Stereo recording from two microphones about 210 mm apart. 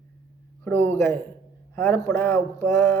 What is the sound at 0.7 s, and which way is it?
Speech, 10° left (ahead or behind).